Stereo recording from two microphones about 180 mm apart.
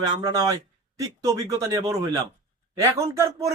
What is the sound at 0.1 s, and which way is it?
A man's voice, 20° right (ahead or behind).